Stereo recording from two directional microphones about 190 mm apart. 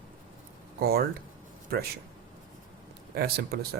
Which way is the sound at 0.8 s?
55° right (ahead or behind).